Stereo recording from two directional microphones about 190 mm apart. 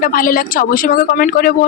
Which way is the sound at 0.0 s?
45° left (ahead or behind).